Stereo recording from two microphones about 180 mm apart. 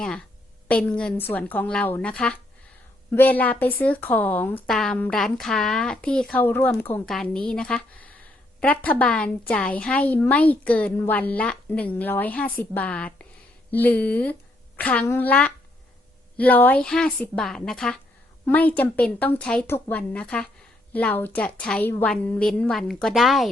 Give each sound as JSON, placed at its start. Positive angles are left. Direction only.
{"t": 0.0, "sound": "a woman's voice", "side_deg": 5}